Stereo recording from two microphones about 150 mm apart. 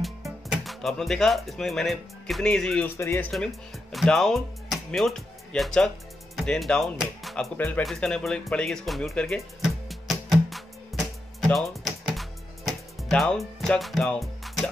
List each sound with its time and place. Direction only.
0.5 s speech: centre (ahead or behind)
3.0 s speech: 20° left (ahead or behind)
3.9 s speech: centre (ahead or behind)
7.5 s speech: 10° left (ahead or behind)
10.9 s music: centre (ahead or behind)